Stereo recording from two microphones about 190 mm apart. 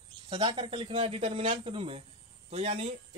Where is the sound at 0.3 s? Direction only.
25° right (ahead or behind).